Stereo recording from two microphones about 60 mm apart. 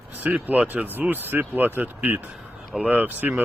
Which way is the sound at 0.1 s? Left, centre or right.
Right.